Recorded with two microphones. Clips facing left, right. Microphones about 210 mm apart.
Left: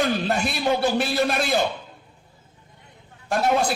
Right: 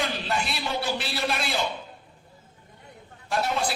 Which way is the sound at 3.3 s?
45° left (ahead or behind).